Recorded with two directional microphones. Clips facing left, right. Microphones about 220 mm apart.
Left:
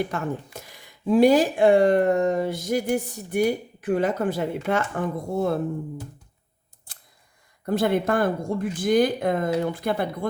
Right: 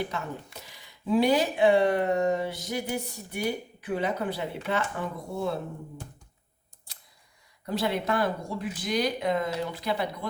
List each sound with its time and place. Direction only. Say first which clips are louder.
0.1 s speech: left 6 dB; 50° left (ahead or behind)
7.6 s speech: left 7 dB; 50° left (ahead or behind)